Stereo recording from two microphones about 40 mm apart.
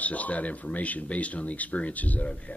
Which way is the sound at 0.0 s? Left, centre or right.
Left.